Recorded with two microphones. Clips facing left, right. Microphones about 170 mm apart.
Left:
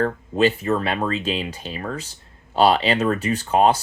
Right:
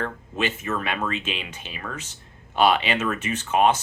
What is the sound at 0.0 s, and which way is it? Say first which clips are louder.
Speech: left 8 dB; 35° left (ahead or behind).